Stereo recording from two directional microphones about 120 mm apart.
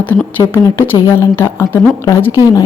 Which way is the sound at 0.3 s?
25° left (ahead or behind).